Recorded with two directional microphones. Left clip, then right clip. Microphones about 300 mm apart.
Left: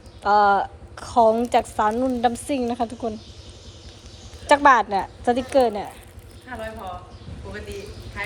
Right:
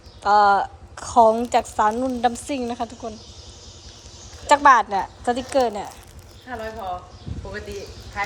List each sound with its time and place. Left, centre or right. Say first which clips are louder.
0.2 s a woman's voice: right 1 dB; centre
4.4 s a woman's voice: right 1 dB; centre
6.5 s speech: right 2 dB; right